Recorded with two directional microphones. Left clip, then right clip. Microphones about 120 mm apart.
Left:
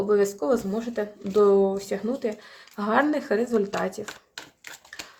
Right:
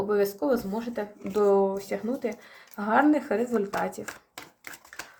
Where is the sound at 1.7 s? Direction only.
30° left (ahead or behind).